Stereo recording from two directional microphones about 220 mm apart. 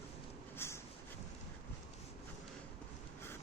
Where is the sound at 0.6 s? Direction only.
10° left (ahead or behind).